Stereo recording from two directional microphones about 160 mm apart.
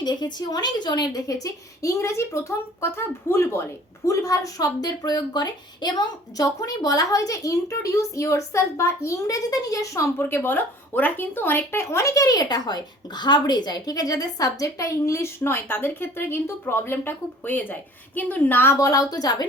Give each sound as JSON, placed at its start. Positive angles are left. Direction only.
{"t": 0.0, "sound": "a woman's voice", "side_deg": 25}